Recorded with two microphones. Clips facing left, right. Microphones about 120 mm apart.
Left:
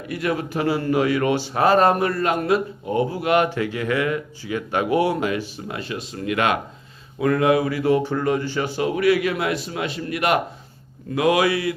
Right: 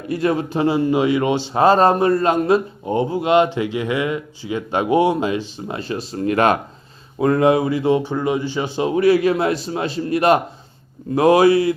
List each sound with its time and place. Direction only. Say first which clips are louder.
0.1 s speech: right 5 dB; 30° right (ahead or behind)